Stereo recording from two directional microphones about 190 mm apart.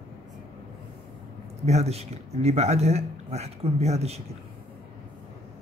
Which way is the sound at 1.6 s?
35° right (ahead or behind).